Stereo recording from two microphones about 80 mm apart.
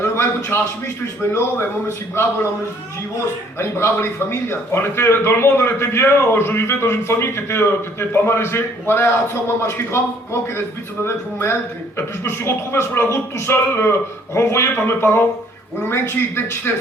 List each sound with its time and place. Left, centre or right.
0.0 s a sound: left
3.6 s a man's voice: left
11.0 s a man's voice: left